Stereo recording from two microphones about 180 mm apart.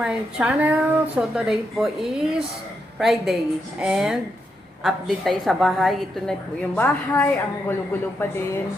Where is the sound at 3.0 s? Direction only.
Centre (ahead or behind).